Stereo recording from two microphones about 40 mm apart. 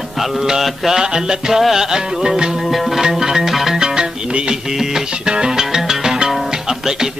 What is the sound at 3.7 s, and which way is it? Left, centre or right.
Music, centre.